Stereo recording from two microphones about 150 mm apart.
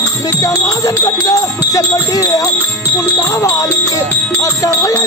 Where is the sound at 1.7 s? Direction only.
20° left (ahead or behind).